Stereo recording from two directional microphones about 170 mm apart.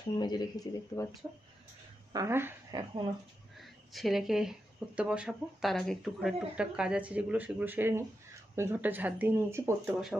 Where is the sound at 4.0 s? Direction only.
Centre (ahead or behind).